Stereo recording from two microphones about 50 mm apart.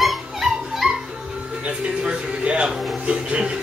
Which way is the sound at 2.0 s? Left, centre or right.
Right.